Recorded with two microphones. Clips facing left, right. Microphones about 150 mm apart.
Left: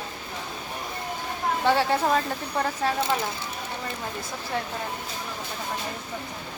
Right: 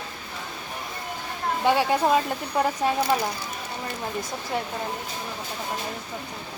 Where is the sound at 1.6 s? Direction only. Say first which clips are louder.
Right 2 dB; 15° right (ahead or behind).